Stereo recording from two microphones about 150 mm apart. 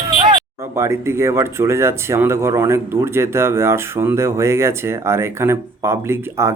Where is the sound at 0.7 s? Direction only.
20° right (ahead or behind).